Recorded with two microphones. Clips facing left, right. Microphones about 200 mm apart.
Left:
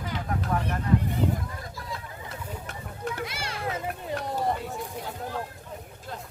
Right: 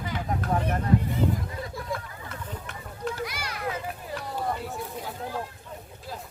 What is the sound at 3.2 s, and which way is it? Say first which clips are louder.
Children playing: even; 25° left (ahead or behind).